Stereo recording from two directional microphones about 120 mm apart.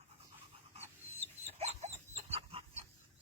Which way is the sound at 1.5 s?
60° right (ahead or behind).